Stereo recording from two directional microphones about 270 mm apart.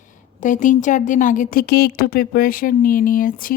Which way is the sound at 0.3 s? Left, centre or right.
Left.